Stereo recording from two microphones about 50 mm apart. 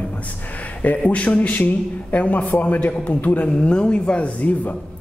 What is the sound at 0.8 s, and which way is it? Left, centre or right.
A man's voice, left.